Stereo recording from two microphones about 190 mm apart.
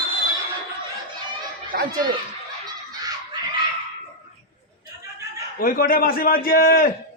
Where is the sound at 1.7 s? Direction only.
50° right (ahead or behind).